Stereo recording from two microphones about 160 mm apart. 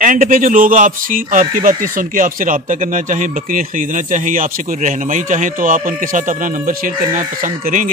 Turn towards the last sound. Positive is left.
turn(degrees=-55)  # may be behind; listen again after turning